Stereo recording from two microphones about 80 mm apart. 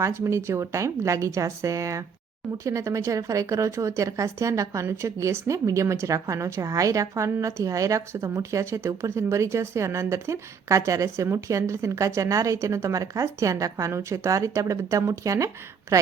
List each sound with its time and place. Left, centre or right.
0.0 s a woman's voice: right